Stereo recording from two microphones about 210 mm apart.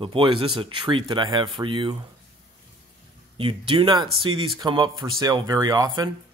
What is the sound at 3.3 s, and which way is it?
Speech, 25° right (ahead or behind).